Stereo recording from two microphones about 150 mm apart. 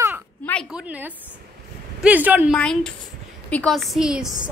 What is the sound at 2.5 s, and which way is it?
A woman's voice, 5° left (ahead or behind).